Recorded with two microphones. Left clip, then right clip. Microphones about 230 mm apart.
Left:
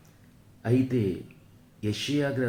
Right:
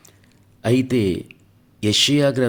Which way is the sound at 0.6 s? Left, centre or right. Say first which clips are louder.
Right 8 dB; right.